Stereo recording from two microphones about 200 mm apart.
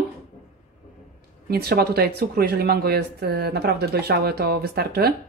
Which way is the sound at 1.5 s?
50° right (ahead or behind).